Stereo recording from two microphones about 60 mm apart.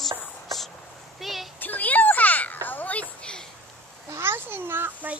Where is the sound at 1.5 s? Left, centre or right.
Left.